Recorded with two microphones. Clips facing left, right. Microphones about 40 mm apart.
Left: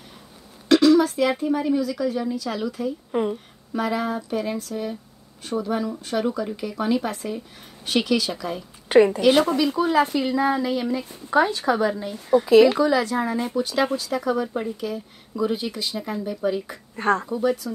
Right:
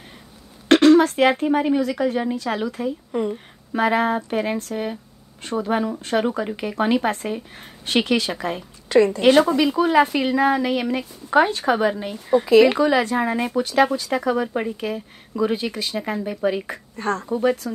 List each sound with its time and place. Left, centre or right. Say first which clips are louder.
0.7 s speech: right 3 dB; right
3.1 s a woman's voice: left 1 dB; centre
3.7 s speech: right 5 dB; right
8.8 s a woman's voice: left 1 dB; left
9.6 s speech: right 3 dB; right
10.1 s speech: right 3 dB; right
11.2 s speech: right 2 dB; right
16.9 s speech: left 3 dB; centre
17.3 s speech: right 2 dB; right